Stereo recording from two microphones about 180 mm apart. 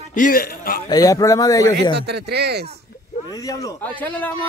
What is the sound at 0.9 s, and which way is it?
Speech, 20° left (ahead or behind).